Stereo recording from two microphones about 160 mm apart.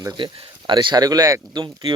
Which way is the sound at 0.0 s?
30° right (ahead or behind).